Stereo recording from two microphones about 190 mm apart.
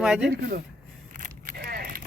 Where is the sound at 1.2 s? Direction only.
50° right (ahead or behind).